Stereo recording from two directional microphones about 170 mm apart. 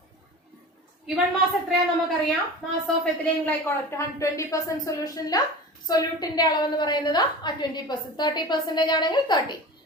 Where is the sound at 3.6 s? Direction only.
15° left (ahead or behind).